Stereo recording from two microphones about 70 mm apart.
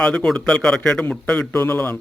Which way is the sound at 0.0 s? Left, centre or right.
Centre.